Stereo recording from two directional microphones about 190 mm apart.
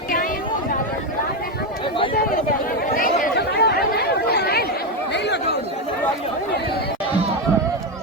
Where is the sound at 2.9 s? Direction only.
50° left (ahead or behind); by 5.4 s 65° left (ahead or behind).